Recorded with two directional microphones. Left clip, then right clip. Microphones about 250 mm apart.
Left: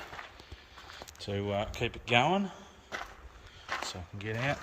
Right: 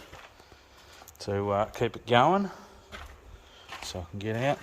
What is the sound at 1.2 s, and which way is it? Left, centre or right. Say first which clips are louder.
Speech: right 6 dB; centre.